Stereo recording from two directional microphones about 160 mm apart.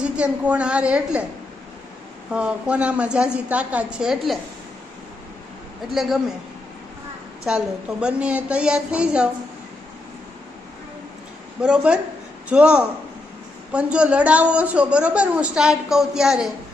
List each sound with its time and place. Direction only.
0.0 s a woman's voice: 10° right (ahead or behind)
2.3 s a woman's voice: 10° right (ahead or behind)
5.9 s speech: centre (ahead or behind)
7.4 s a woman's voice: 5° right (ahead or behind)
11.6 s a woman's voice: 5° right (ahead or behind)